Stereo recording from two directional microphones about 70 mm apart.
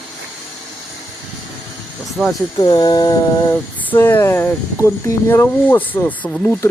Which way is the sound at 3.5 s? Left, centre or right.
Left.